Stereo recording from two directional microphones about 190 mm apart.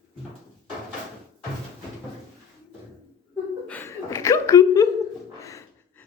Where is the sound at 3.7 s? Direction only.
10° left (ahead or behind).